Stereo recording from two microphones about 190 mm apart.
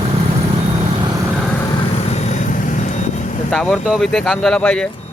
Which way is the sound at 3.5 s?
Centre (ahead or behind).